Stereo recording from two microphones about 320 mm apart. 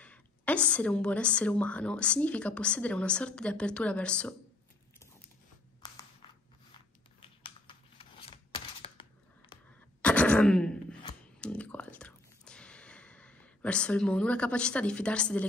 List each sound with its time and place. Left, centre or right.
0.0 s a woman's voice: centre
7.2 s computer keyboard: centre
10.0 s throat clearing: centre
11.4 s whispering: centre